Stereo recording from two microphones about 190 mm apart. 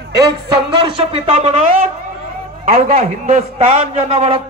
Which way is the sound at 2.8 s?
40° right (ahead or behind).